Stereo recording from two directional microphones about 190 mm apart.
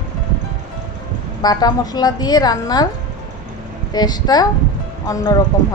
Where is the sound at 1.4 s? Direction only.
20° left (ahead or behind).